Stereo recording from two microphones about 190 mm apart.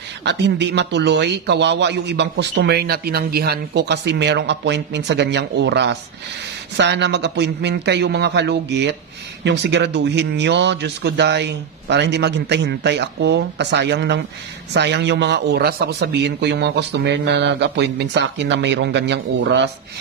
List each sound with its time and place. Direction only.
0.2 s a man's voice: 65° right (ahead or behind)